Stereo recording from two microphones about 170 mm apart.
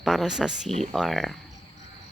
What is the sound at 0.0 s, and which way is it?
Speech, centre (ahead or behind).